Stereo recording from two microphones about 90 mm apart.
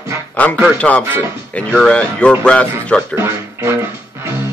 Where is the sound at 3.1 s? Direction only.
25° right (ahead or behind).